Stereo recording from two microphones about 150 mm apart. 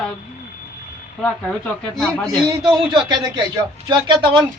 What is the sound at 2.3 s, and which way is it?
A man's voice, 25° right (ahead or behind).